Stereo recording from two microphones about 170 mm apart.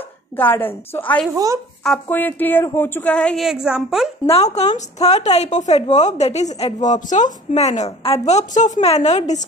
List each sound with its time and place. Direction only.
0.4 s a woman's voice: 10° left (ahead or behind)
1.3 s speech: 20° right (ahead or behind)
1.8 s a woman's voice: 5° left (ahead or behind)
4.3 s a woman's voice: 40° left (ahead or behind)